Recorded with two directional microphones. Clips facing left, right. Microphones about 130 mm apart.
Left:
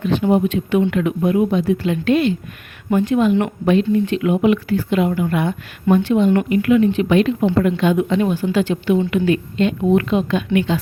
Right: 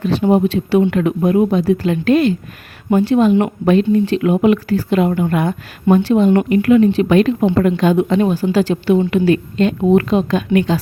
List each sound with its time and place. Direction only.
0.0 s speech: 40° right (ahead or behind)